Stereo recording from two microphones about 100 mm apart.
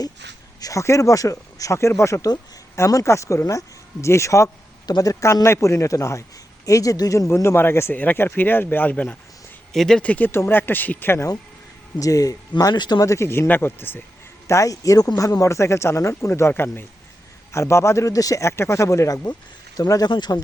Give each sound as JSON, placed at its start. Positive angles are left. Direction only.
{"t": 0.6, "sound": "speech", "side_deg": 30}
{"t": 4.9, "sound": "a man's voice", "side_deg": 40}
{"t": 5.2, "sound": "speech", "side_deg": 30}
{"t": 9.7, "sound": "speech", "side_deg": 5}
{"t": 11.9, "sound": "speech", "side_deg": 35}
{"t": 14.4, "sound": "speech", "side_deg": 35}